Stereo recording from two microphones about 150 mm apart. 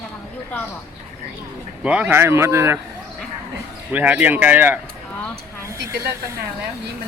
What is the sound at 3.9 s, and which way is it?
Speech, 10° right (ahead or behind).